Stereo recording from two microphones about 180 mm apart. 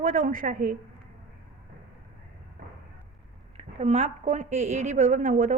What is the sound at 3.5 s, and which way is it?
A woman's voice, 40° right (ahead or behind).